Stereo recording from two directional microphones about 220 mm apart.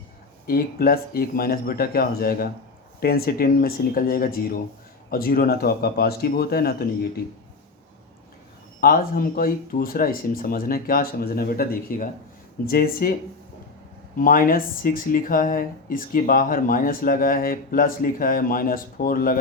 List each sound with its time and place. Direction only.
0.4 s speech: 40° left (ahead or behind)
8.8 s speech: 40° left (ahead or behind)
14.2 s speech: 40° left (ahead or behind)